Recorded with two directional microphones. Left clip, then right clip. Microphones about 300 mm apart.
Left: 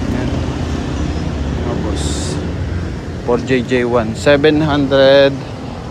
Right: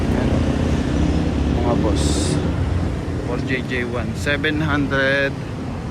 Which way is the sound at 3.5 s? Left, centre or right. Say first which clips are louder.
Left 9 dB; left.